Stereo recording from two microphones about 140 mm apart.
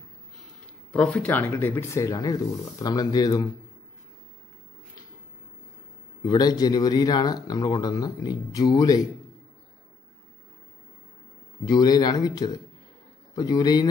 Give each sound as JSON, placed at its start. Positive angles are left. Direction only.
{"t": 0.9, "sound": "speech", "side_deg": 10}
{"t": 6.2, "sound": "speech", "side_deg": 30}
{"t": 11.6, "sound": "speech", "side_deg": 30}